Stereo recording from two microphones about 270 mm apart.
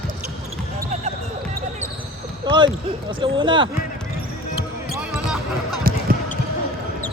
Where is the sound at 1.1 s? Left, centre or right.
Right.